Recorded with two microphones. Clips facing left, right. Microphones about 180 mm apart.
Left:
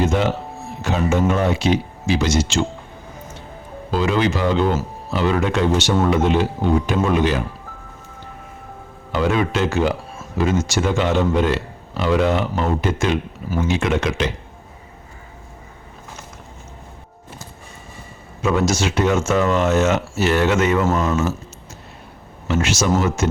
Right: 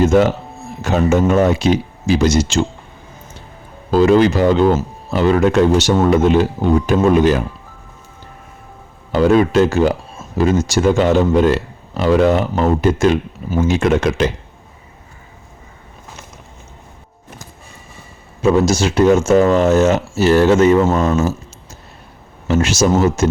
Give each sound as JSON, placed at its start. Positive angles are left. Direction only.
{"t": 0.0, "sound": "speech", "side_deg": -45}
{"t": 3.9, "sound": "speech", "side_deg": -40}
{"t": 9.1, "sound": "speech", "side_deg": -40}
{"t": 18.4, "sound": "speech", "side_deg": -35}
{"t": 22.4, "sound": "speech", "side_deg": -40}